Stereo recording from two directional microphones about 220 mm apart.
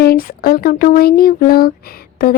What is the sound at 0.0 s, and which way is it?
Speech, 45° left (ahead or behind).